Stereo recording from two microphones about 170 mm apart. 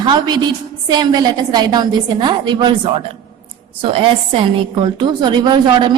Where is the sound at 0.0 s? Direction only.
25° right (ahead or behind).